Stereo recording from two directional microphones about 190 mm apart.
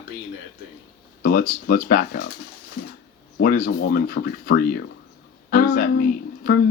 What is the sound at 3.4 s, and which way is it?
Speech, 50° left (ahead or behind).